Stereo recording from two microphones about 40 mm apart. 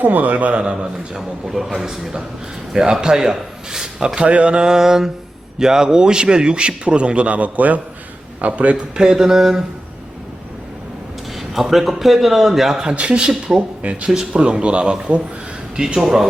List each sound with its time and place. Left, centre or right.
0.0 s a man's voice: right
0.6 s a man's voice: right
1.5 s speech: centre
4.1 s a man's voice: right
8.7 s speech: centre
11.7 s speech: centre
12.7 s a man's voice: right
13.6 s speech: right
14.1 s speech: centre
14.4 s a man's voice: right; by 16.2 s centre